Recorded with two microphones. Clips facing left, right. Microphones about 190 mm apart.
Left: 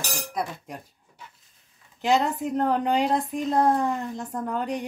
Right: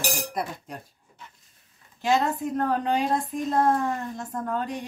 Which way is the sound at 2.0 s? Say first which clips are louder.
Left 1 dB; 15° left (ahead or behind).